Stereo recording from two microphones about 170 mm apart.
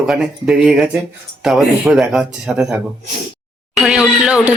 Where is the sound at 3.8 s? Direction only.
5° right (ahead or behind).